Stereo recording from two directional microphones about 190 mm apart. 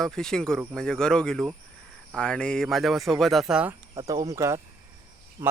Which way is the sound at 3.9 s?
20° right (ahead or behind).